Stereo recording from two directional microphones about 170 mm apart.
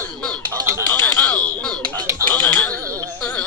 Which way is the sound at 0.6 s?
15° right (ahead or behind).